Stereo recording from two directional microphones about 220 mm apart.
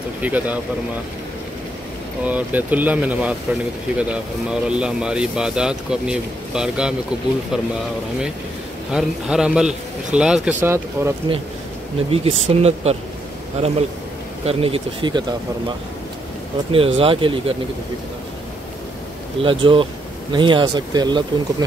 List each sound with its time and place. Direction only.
0.2 s speech: 5° right (ahead or behind)
2.2 s speech: 5° right (ahead or behind)
8.9 s speech: 5° right (ahead or behind)
12.1 s speech: 25° right (ahead or behind)
16.7 s speech: 25° right (ahead or behind)
19.4 s speech: 25° right (ahead or behind)